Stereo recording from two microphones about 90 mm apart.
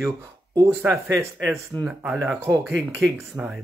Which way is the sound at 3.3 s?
25° right (ahead or behind).